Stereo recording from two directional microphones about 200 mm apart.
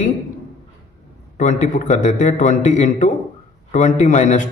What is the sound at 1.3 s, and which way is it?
A man's voice, 40° left (ahead or behind).